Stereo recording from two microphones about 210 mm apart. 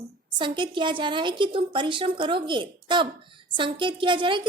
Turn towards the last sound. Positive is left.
turn(degrees=-25)  # may be behind; listen again after turning